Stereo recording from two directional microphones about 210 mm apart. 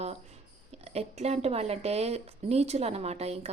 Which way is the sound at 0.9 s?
30° right (ahead or behind).